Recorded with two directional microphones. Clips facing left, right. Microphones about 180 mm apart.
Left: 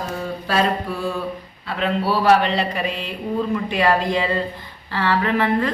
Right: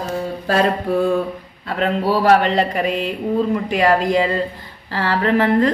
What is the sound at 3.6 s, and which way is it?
A woman's voice, 40° right (ahead or behind).